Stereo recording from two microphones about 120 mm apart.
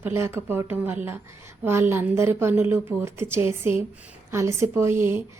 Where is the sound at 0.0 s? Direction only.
20° right (ahead or behind).